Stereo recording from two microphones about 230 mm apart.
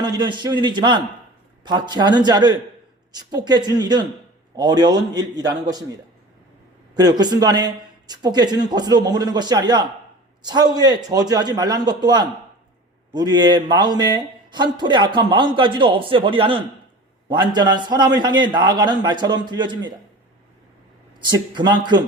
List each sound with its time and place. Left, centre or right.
0.0 s a man's voice: centre
6.9 s a man's voice: centre
21.2 s a man's voice: centre